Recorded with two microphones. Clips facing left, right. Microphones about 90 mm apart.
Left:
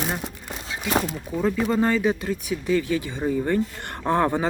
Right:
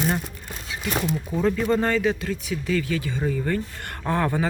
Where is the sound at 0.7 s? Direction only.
30° left (ahead or behind).